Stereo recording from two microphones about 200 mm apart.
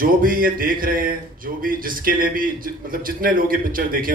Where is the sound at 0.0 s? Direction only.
45° right (ahead or behind).